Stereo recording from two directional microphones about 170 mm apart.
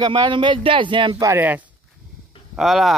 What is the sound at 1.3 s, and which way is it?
Speech, 10° right (ahead or behind).